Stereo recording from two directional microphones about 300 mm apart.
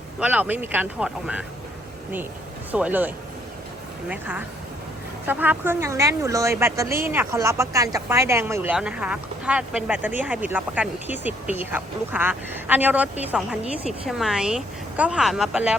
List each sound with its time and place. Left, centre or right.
0.2 s speech: centre
2.7 s speech: centre
4.1 s a woman's voice: centre